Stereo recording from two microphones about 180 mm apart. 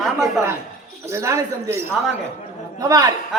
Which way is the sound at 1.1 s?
15° right (ahead or behind).